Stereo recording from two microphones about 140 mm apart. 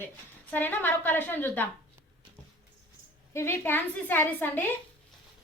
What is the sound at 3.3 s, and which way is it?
A woman's voice, 20° left (ahead or behind).